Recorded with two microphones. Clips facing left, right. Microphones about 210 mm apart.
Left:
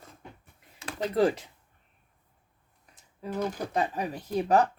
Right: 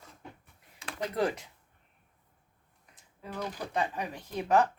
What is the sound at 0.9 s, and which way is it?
Speech, 30° left (ahead or behind).